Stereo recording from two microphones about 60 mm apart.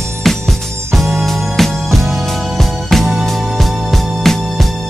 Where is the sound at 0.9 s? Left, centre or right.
Centre.